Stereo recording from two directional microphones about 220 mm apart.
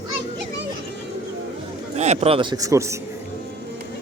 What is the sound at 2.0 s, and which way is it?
Speech, 30° right (ahead or behind).